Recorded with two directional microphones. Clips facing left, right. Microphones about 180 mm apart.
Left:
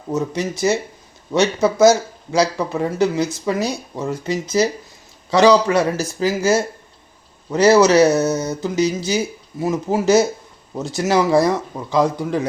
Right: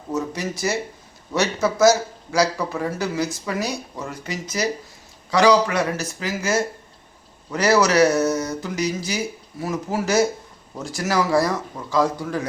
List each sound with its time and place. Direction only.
0.1 s speech: 20° left (ahead or behind)